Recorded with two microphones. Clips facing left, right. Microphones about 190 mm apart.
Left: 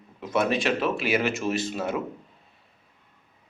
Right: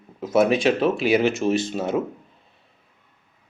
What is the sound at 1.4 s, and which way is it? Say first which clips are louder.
Speech: right 5 dB; 30° right (ahead or behind).